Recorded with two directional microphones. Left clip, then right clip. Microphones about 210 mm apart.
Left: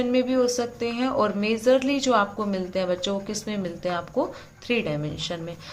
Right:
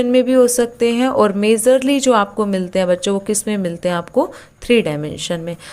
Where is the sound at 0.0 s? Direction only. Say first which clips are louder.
Right 10 dB; 40° right (ahead or behind).